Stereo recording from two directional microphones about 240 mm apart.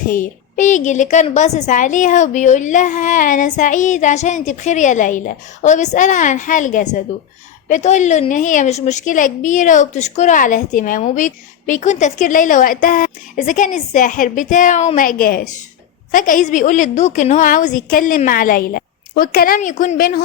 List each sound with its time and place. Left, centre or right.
0.1 s a woman's voice: left